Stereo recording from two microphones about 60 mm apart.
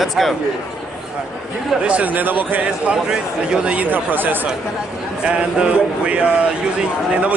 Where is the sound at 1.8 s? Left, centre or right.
Right.